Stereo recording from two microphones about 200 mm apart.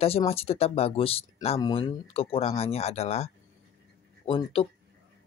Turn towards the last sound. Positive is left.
turn(degrees=25)  # may be behind; listen again after turning